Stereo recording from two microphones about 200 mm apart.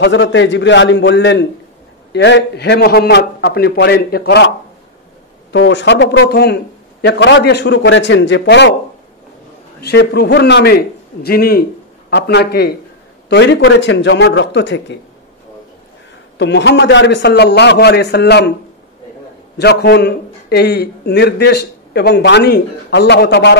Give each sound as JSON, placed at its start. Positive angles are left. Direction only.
{"t": 0.0, "sound": "a man's voice", "side_deg": 65}
{"t": 5.5, "sound": "a man's voice", "side_deg": 65}
{"t": 9.8, "sound": "a man's voice", "side_deg": 55}
{"t": 16.3, "sound": "a man's voice", "side_deg": 60}
{"t": 19.6, "sound": "a man's voice", "side_deg": 55}